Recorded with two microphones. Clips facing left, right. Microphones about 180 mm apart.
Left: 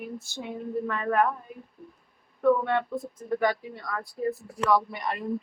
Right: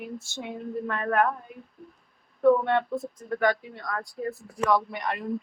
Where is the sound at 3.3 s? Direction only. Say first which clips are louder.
Right 1 dB; 10° left (ahead or behind).